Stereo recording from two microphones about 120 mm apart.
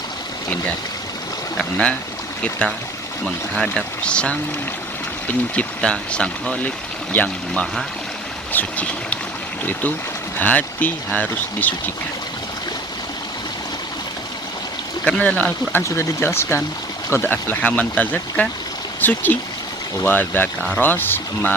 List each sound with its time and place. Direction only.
1.5 s speech: 10° left (ahead or behind)
5.5 s speech: 10° left (ahead or behind)
10.3 s speech: 15° left (ahead or behind)
15.0 s speech: 10° left (ahead or behind)